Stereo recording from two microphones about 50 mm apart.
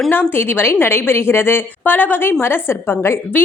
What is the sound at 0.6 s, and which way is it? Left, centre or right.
A woman's voice, left.